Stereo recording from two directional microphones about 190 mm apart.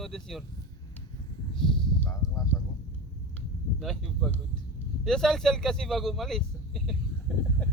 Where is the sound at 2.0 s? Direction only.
15° left (ahead or behind).